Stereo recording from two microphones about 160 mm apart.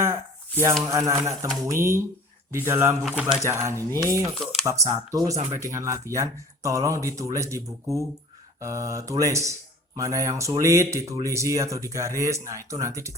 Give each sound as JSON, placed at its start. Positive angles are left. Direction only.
{"t": 0.0, "sound": "a sound", "side_deg": -15}
{"t": 0.9, "sound": "speech", "side_deg": -20}
{"t": 3.0, "sound": "speech", "side_deg": -5}
{"t": 3.7, "sound": "speech", "side_deg": -20}